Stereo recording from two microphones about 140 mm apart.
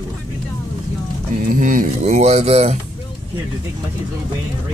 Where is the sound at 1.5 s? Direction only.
80° right.